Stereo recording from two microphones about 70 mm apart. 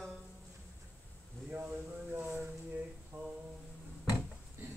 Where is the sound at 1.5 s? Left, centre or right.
Right.